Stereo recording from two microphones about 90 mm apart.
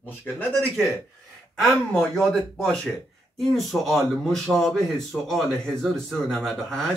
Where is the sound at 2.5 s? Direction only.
10° left (ahead or behind).